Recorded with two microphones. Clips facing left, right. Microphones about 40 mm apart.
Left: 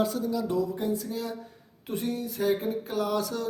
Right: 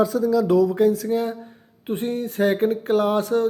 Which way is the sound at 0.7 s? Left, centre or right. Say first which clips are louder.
Right 11 dB; right.